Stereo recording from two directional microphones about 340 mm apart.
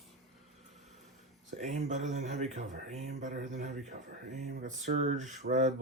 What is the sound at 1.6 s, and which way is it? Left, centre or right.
Speech, right.